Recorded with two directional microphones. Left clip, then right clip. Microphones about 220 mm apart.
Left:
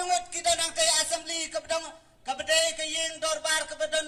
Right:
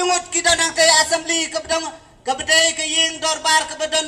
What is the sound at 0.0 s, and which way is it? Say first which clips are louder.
Speech: right 9 dB; 35° left (ahead or behind).